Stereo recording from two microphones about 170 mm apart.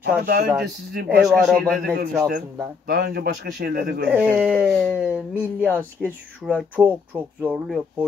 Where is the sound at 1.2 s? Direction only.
Centre (ahead or behind).